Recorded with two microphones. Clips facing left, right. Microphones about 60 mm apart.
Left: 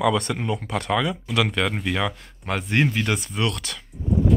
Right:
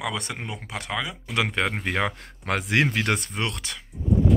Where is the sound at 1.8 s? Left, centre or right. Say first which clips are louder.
Left 1 dB; right.